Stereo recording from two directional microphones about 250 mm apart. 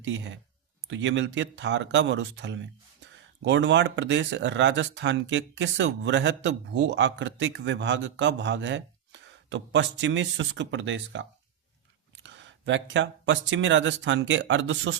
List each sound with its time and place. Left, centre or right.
0.0 s speech: right